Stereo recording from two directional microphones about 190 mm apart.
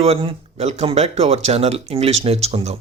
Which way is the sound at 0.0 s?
30° right (ahead or behind).